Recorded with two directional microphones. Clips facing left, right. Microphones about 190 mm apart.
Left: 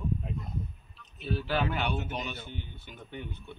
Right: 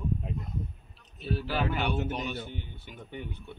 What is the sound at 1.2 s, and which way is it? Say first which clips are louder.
Speech: right 1 dB; 40° right (ahead or behind).